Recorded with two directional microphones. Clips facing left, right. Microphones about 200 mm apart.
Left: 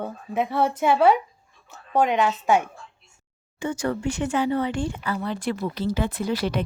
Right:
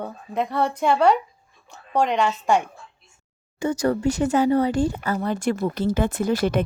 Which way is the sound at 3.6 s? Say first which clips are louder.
Right 4 dB; 40° right (ahead or behind).